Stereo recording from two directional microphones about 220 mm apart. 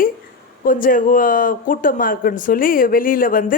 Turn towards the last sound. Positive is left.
turn(degrees=40)  # may be behind; listen again after turning